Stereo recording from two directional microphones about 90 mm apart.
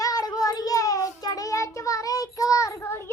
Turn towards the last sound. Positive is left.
turn(degrees=30)  # may be behind; listen again after turning